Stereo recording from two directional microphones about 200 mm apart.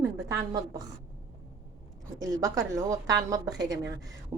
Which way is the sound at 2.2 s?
15° right (ahead or behind).